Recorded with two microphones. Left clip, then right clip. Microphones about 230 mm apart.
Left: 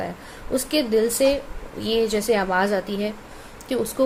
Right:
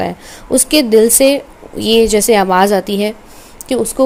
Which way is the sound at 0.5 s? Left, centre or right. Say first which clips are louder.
Right 11 dB; right.